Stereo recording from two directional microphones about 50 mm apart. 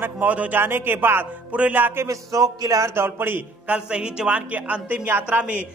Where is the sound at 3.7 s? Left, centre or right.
Centre.